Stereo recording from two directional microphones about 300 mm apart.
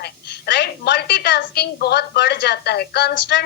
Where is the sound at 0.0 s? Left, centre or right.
Left.